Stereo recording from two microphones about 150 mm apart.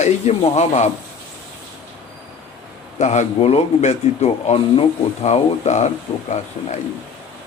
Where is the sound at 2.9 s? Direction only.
50° left (ahead or behind).